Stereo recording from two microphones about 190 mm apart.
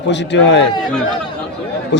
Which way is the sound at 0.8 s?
5° left (ahead or behind).